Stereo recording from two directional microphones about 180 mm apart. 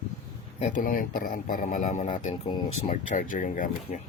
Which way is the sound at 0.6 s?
45° left (ahead or behind).